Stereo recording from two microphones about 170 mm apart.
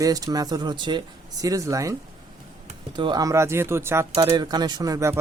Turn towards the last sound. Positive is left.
turn(degrees=-20)  # may be behind; listen again after turning